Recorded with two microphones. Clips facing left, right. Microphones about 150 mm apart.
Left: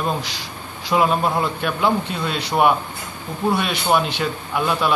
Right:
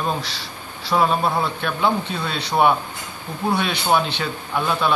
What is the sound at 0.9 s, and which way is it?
Speech, centre (ahead or behind).